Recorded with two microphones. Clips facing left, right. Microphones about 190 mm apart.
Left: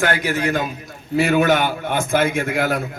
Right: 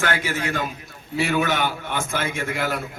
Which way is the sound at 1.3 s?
50° left (ahead or behind).